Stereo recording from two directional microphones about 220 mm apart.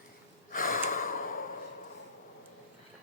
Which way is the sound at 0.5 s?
40° left (ahead or behind).